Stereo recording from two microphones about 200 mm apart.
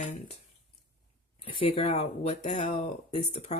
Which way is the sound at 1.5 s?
25° left (ahead or behind).